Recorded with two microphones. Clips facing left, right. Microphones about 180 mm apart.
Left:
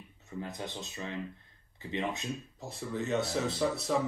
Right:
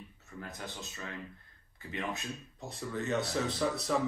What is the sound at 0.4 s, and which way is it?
Speech, 20° left (ahead or behind).